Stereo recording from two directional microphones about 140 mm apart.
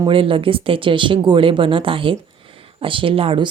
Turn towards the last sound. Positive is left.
turn(degrees=-40)  # may be behind; listen again after turning